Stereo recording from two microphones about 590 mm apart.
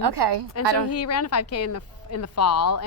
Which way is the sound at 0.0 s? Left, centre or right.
Right.